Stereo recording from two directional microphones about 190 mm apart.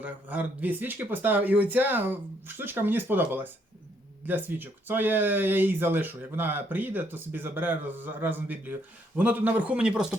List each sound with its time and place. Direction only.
0.0 s speech: 10° right (ahead or behind)